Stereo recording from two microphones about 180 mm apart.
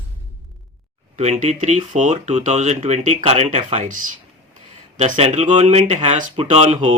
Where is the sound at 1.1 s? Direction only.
40° right (ahead or behind).